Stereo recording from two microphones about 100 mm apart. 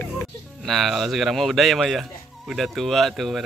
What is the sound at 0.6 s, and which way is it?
Speech, centre (ahead or behind).